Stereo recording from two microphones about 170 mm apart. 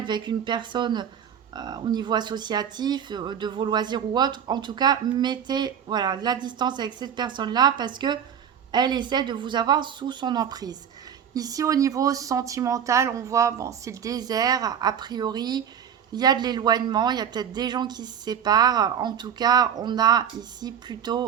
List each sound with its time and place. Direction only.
0.0 s speech: 25° right (ahead or behind)